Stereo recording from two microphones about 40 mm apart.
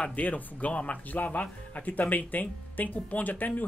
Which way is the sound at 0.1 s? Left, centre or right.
Left.